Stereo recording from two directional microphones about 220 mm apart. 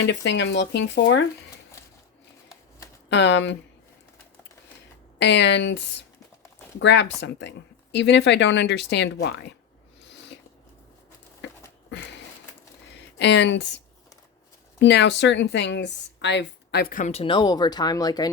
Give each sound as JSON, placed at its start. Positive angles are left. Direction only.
{"t": 0.0, "sound": "speech", "side_deg": 55}
{"t": 3.1, "sound": "speech", "side_deg": 50}
{"t": 5.2, "sound": "speech", "side_deg": 50}
{"t": 11.4, "sound": "a sound", "side_deg": 55}
{"t": 13.1, "sound": "speech", "side_deg": 50}
{"t": 14.8, "sound": "speech", "side_deg": 50}